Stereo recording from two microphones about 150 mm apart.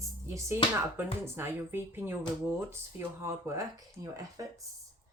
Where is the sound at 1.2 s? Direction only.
15° right (ahead or behind).